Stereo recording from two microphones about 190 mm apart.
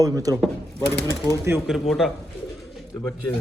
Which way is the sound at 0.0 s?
20° right (ahead or behind).